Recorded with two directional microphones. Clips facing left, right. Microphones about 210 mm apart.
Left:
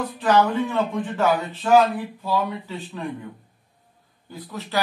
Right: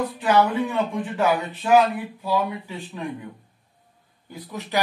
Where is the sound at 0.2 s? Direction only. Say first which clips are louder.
Left 1 dB; 15° right (ahead or behind).